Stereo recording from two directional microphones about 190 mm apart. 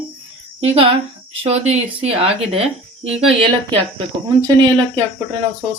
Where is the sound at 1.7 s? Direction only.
30° right (ahead or behind).